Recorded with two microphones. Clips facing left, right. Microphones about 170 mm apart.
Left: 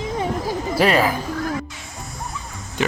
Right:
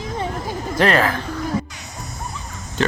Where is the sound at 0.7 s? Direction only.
5° left (ahead or behind).